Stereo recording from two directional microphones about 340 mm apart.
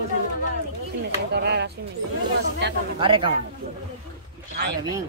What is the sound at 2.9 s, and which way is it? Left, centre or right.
Speech, centre.